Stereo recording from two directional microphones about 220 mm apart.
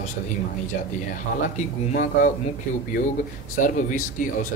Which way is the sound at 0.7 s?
40° left (ahead or behind).